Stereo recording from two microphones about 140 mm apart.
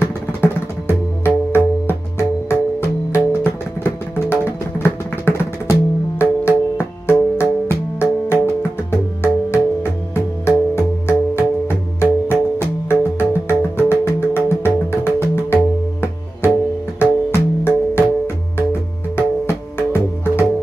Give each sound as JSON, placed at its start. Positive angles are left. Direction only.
{"t": 0.0, "sound": "music", "side_deg": 15}
{"t": 4.1, "sound": "music", "side_deg": 15}